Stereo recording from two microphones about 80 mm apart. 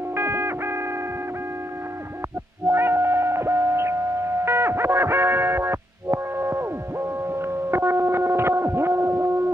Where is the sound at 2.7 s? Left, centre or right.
Right.